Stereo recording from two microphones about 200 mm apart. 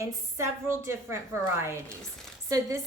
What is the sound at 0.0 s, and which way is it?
Speech, 15° right (ahead or behind).